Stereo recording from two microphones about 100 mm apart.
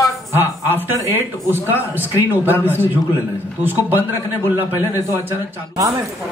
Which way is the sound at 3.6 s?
20° right (ahead or behind).